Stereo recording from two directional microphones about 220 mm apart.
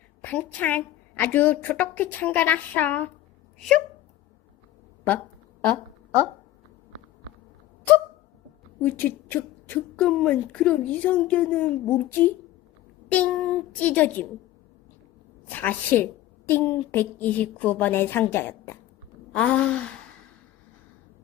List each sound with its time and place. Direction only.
0.2 s a woman's voice: 10° left (ahead or behind)
8.8 s a woman's voice: 10° left (ahead or behind)
15.4 s a woman's voice: 10° left (ahead or behind)